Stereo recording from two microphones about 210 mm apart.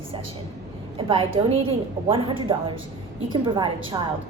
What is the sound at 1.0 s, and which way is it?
A woman's voice, 25° right (ahead or behind).